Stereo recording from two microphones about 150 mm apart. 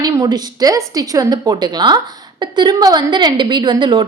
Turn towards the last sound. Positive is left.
turn(degrees=-30)  # may be behind; listen again after turning